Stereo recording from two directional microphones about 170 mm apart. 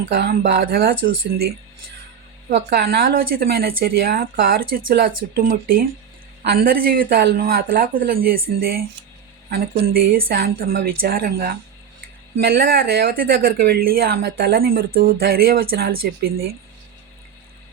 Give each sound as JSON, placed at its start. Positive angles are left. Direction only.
{"t": 0.1, "sound": "speech", "side_deg": -60}
{"t": 2.5, "sound": "speech", "side_deg": -75}